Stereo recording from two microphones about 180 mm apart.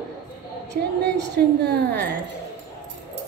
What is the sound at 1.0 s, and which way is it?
Speech, 70° right (ahead or behind).